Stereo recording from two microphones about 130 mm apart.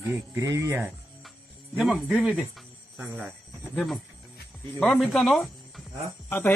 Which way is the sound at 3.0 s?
10° right (ahead or behind).